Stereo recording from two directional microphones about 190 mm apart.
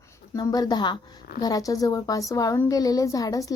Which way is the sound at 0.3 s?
20° left (ahead or behind).